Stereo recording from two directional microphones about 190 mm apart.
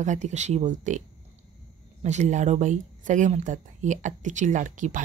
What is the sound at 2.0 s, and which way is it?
Speech, 35° right (ahead or behind).